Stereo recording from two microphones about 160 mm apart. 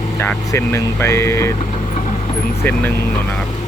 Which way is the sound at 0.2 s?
15° left (ahead or behind).